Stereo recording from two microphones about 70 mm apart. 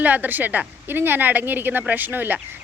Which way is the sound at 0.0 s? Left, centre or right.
Right.